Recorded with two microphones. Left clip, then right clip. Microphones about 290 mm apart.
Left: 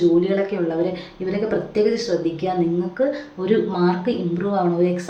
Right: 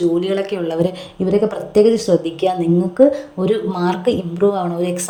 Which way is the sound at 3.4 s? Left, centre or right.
Right.